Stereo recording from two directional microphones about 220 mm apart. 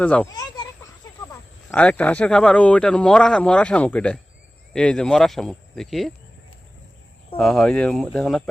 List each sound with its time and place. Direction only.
0.0 s speech: 5° left (ahead or behind)
0.3 s speech: 15° left (ahead or behind); by 6.1 s centre (ahead or behind)
7.3 s speech: centre (ahead or behind)